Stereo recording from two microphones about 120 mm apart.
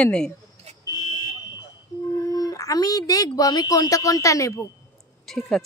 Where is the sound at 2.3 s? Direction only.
30° left (ahead or behind).